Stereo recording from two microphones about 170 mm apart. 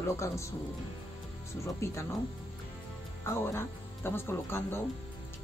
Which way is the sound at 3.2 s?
15° left (ahead or behind).